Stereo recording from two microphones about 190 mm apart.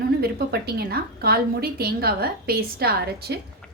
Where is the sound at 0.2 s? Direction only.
55° right (ahead or behind).